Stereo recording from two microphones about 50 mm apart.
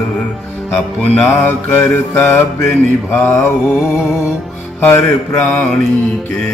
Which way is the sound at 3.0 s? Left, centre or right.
Left.